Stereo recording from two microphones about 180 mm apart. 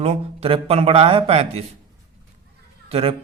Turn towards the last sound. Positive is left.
turn(degrees=-35)  # may be behind; listen again after turning